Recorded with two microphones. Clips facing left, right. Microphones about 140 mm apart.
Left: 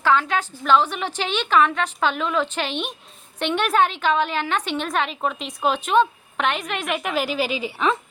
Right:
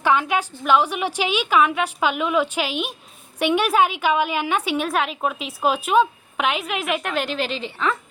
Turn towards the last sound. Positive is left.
turn(degrees=5)  # may be behind; listen again after turning